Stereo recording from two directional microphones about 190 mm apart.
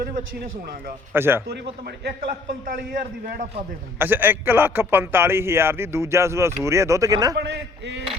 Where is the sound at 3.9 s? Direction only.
10° right (ahead or behind).